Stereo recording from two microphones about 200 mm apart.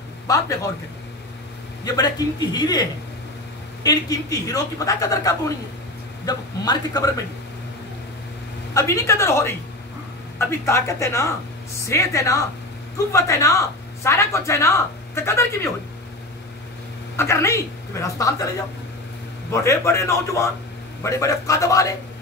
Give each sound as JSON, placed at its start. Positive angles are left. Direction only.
{"t": 0.3, "sound": "speech", "side_deg": 15}
{"t": 1.9, "sound": "a man's voice", "side_deg": 20}
{"t": 8.7, "sound": "speech", "side_deg": 15}
{"t": 17.2, "sound": "speech", "side_deg": 15}
{"t": 19.5, "sound": "speech", "side_deg": 15}